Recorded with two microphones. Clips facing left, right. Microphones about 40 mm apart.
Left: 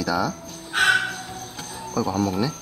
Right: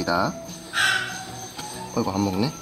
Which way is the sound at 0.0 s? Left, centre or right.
Centre.